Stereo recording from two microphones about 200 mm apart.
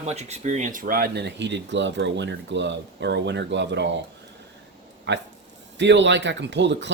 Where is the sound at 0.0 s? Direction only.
35° right (ahead or behind); by 3.8 s 60° right (ahead or behind).